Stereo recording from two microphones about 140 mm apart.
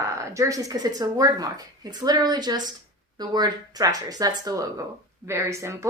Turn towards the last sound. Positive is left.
turn(degrees=-20)  # may be behind; listen again after turning